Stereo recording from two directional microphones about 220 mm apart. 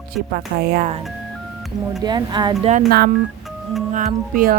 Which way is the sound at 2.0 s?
20° right (ahead or behind).